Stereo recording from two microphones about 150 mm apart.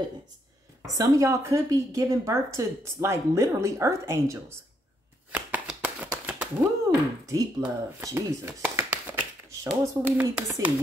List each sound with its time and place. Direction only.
0.8 s a woman's voice: 20° right (ahead or behind)
5.3 s shuffling cards: 10° right (ahead or behind)
6.9 s a woman's voice: 20° right (ahead or behind)
8.9 s tap: 15° right (ahead or behind)
10.0 s speech: 10° right (ahead or behind)